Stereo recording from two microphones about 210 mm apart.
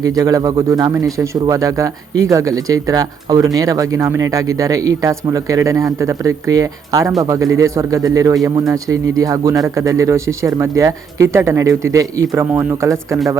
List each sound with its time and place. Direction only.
0.0 s speech: 15° right (ahead or behind)